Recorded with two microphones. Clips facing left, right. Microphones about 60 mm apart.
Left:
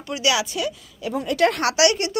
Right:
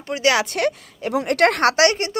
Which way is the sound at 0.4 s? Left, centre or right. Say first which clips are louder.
Right 5 dB; right.